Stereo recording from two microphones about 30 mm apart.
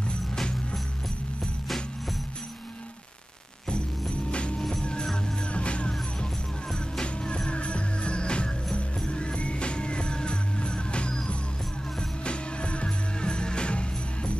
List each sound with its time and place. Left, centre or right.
4.1 s a sound: left
4.6 s music: centre
5.5 s music: left
6.7 s music: left
12.3 s music: left